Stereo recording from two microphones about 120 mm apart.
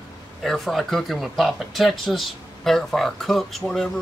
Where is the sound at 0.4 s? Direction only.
Centre (ahead or behind).